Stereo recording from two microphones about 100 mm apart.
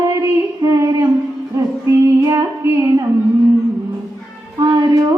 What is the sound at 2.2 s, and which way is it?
Music, 35° right (ahead or behind).